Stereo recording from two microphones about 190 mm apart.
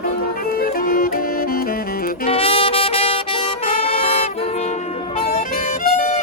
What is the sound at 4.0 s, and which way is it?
Music, 30° left (ahead or behind).